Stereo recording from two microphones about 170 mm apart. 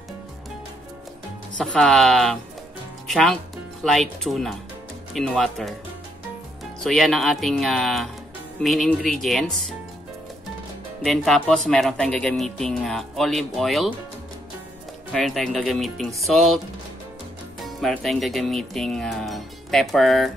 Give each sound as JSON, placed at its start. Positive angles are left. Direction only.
{"t": 1.6, "sound": "speech", "side_deg": 5}
{"t": 6.8, "sound": "speech", "side_deg": 5}
{"t": 11.0, "sound": "speech", "side_deg": 0}
{"t": 15.1, "sound": "speech", "side_deg": 0}
{"t": 17.7, "sound": "speech", "side_deg": 0}